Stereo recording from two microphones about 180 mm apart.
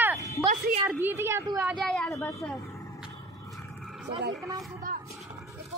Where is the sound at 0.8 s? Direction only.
10° right (ahead or behind).